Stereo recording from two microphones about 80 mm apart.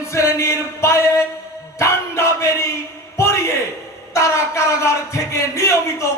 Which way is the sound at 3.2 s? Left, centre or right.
Left.